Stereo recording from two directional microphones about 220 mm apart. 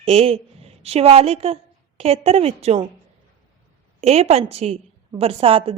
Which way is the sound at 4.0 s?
30° right (ahead or behind).